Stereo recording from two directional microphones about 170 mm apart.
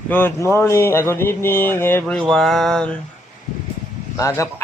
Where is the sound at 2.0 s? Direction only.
Centre (ahead or behind).